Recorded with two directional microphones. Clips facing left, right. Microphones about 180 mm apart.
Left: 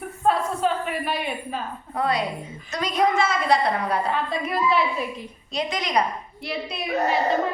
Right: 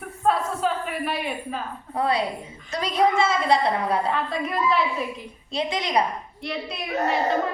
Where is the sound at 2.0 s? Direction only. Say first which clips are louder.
Right 1 dB; 30° right (ahead or behind).